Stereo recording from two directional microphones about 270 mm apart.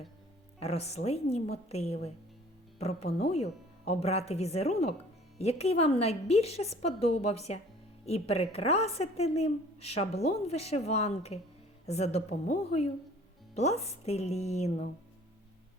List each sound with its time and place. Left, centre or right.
0.6 s a woman's voice: left